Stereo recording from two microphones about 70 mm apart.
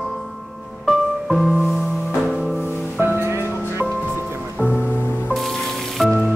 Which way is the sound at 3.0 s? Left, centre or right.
Right.